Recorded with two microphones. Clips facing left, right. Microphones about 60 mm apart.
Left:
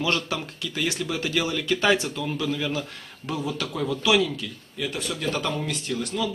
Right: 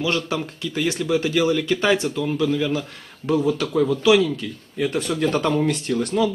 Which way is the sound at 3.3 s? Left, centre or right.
Right.